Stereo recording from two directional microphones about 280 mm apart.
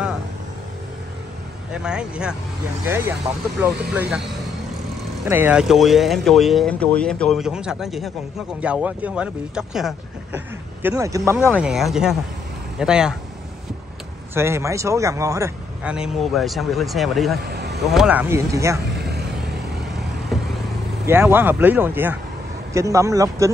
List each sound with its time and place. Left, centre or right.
1.7 s speech: centre
3.9 s speech: centre
5.3 s speech: centre
14.3 s speech: centre
17.5 s a sound: right
17.7 s speech: centre
18.9 s vehicle: right
20.3 s vehicle: centre
21.1 s speech: centre